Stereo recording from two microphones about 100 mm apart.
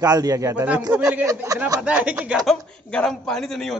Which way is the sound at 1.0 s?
30° right (ahead or behind).